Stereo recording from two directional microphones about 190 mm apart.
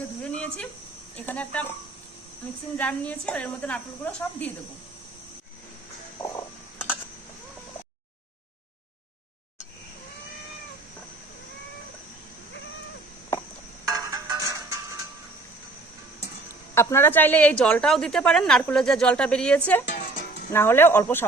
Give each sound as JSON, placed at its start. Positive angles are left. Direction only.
{"t": 0.3, "sound": "a sound", "side_deg": 5}
{"t": 1.1, "sound": "a woman's voice", "side_deg": 10}
{"t": 2.7, "sound": "a woman's voice", "side_deg": 5}
{"t": 6.1, "sound": "a sound", "side_deg": 20}
{"t": 13.8, "sound": "music", "side_deg": -20}
{"t": 16.7, "sound": "a woman's voice", "side_deg": 15}
{"t": 19.9, "sound": "music", "side_deg": 45}
{"t": 20.5, "sound": "a woman's voice", "side_deg": 10}